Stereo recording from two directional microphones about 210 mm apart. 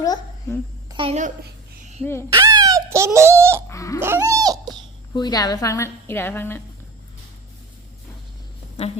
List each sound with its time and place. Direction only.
0.0 s a child's voice: 15° left (ahead or behind)
0.9 s a woman's voice: 25° right (ahead or behind)
2.3 s speech: 20° right (ahead or behind)
3.7 s baby cry: 15° left (ahead or behind)
4.0 s a sound: 15° right (ahead or behind)
5.1 s a woman's voice: 20° left (ahead or behind)